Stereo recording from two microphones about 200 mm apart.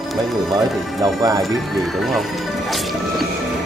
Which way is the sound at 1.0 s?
15° right (ahead or behind).